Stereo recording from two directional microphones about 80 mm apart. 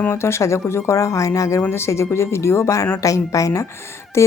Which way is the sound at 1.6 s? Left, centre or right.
Left.